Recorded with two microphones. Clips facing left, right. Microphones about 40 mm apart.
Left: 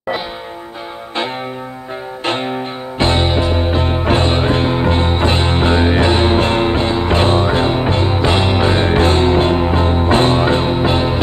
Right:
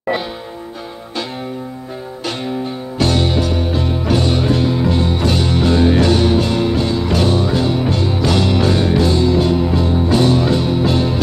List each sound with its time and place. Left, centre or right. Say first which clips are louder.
2.2 s music: left 3 dB; left